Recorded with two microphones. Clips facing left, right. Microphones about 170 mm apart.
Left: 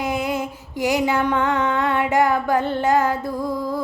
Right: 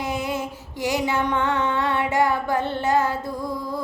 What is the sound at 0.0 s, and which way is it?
Music, 10° left (ahead or behind).